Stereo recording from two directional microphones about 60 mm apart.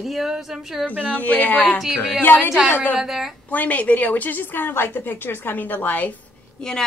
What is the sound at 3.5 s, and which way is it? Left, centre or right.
A woman's voice, left.